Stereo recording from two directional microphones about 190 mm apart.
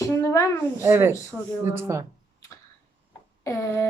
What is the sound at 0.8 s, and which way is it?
A woman's voice, 10° right (ahead or behind).